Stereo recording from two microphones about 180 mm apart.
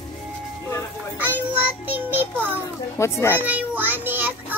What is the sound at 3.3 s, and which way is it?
Child singing, 10° right (ahead or behind).